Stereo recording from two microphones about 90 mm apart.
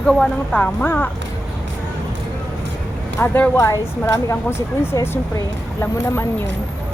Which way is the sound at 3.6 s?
35° left (ahead or behind).